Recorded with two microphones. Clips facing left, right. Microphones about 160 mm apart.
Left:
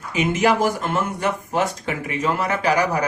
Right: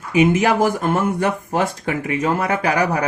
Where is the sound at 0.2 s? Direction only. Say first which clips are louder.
Right 3 dB; 50° right (ahead or behind).